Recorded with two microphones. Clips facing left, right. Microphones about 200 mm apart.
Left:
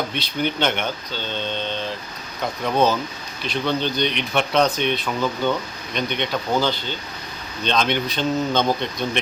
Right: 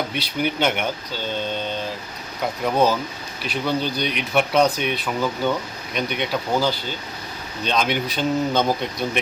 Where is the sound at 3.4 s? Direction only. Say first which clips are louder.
Even; 10° right (ahead or behind).